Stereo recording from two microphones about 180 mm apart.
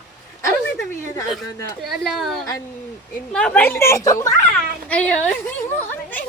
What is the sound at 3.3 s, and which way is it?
A woman's voice, 5° left (ahead or behind).